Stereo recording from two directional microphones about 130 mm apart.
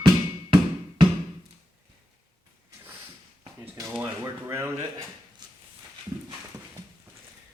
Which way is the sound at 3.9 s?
20° right (ahead or behind).